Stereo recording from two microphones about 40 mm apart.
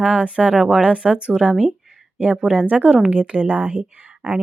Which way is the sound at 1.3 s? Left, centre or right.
Centre.